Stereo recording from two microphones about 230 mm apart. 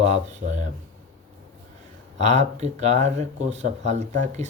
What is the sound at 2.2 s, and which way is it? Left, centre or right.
Speech, right.